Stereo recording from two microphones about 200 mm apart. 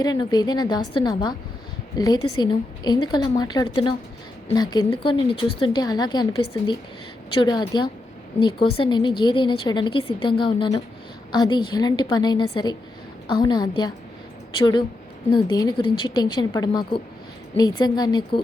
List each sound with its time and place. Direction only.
0.0 s a woman's voice: 20° left (ahead or behind)